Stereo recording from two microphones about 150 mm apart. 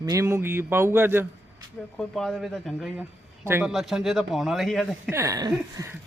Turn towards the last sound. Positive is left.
turn(degrees=-25)  # may be behind; listen again after turning